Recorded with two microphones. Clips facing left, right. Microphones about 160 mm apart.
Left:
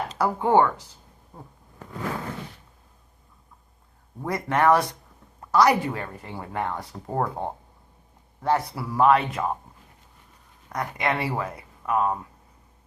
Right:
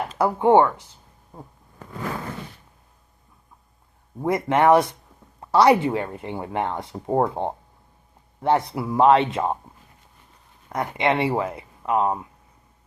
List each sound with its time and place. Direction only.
0.2 s speech: 20° right (ahead or behind)
4.2 s speech: 25° right (ahead or behind)
10.7 s speech: 25° right (ahead or behind)